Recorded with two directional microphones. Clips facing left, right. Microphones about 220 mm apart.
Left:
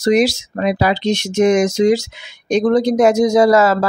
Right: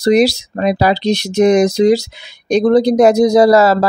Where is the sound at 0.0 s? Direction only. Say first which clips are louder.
Right 3 dB; 35° right (ahead or behind).